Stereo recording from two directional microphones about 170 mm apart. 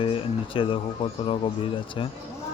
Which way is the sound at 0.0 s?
30° left (ahead or behind).